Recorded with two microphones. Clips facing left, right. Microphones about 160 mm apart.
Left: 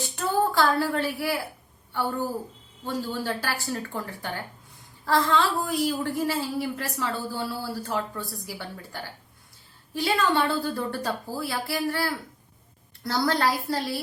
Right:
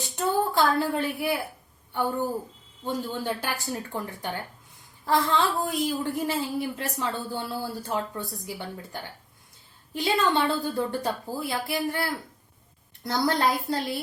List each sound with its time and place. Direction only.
0.0 s a woman's voice: 20° right (ahead or behind)